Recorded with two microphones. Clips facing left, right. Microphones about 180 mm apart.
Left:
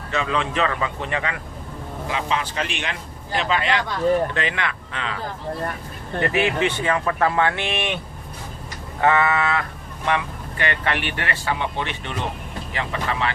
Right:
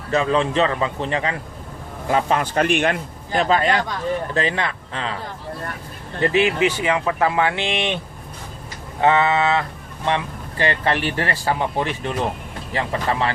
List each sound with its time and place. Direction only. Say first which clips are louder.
0.1 s speech: right 5 dB; 35° right (ahead or behind)
2.0 s speech: right 6 dB; 50° right (ahead or behind)
6.2 s speech: right 4 dB; 25° right (ahead or behind)
6.7 s speech: right 1 dB; 15° right (ahead or behind)
9.0 s speech: right 2 dB; 20° right (ahead or behind); by 13.3 s 35° right (ahead or behind)